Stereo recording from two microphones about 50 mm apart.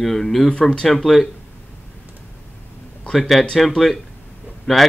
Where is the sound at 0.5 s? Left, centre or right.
Centre.